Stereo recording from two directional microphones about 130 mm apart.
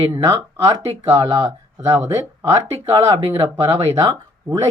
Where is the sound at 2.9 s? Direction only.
40° right (ahead or behind).